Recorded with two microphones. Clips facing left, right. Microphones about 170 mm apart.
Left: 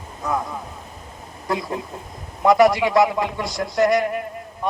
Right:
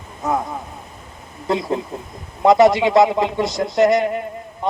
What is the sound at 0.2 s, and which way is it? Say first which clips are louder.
Speech: right 3 dB; 20° right (ahead or behind).